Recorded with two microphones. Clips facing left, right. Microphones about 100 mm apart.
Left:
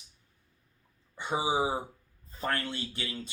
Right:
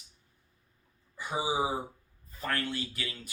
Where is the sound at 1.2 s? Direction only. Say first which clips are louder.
Left 2 dB; 30° left (ahead or behind).